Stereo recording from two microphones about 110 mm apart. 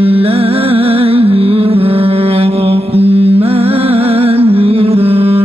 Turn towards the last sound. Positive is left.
turn(degrees=-60)  # may be behind; listen again after turning